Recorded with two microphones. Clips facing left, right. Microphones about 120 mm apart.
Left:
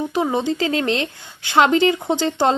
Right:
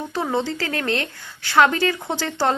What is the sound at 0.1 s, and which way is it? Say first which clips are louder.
Speech: left 3 dB; 15° left (ahead or behind).